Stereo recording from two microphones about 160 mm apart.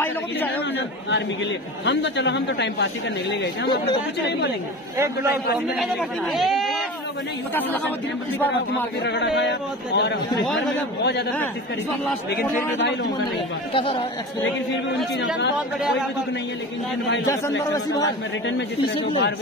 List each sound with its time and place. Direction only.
1.9 s speech: 90° left
4.9 s a man's voice: 15° right (ahead or behind)
5.8 s speech: centre (ahead or behind)
9.0 s speech: 90° left
13.7 s speech: 35° left (ahead or behind)
17.3 s speech: 20° left (ahead or behind)